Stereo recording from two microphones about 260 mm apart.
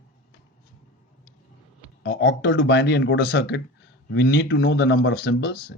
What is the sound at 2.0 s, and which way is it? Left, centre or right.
Speech, left.